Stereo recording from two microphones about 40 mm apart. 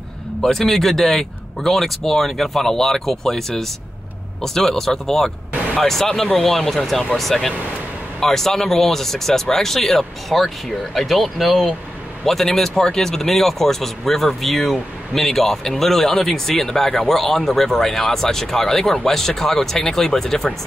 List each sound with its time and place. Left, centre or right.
0.4 s speech: centre
5.5 s a sound: right
5.8 s speech: centre